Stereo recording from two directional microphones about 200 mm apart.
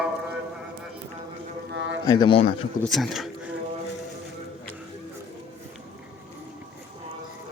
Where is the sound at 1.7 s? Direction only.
65° right (ahead or behind).